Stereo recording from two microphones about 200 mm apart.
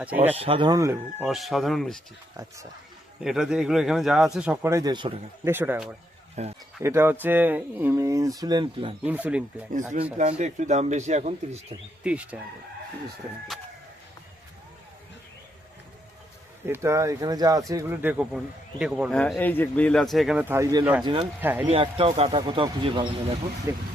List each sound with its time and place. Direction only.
0.3 s speech: 25° right (ahead or behind)
1.2 s speech: centre (ahead or behind)
2.3 s speech: 15° right (ahead or behind)
3.2 s speech: centre (ahead or behind); by 5.1 s 20° right (ahead or behind)
5.5 s speech: 10° right (ahead or behind)
6.4 s speech: 35° right (ahead or behind)
6.8 s speech: 10° right (ahead or behind)
9.0 s speech: 5° right (ahead or behind)
10.2 s speech: 35° right (ahead or behind)
12.0 s speech: 5° right (ahead or behind)
16.6 s speech: 15° right (ahead or behind)
19.2 s speech: 10° left (ahead or behind); by 21.2 s 25° right (ahead or behind)
21.4 s speech: 10° right (ahead or behind)
21.7 s speech: 30° right (ahead or behind)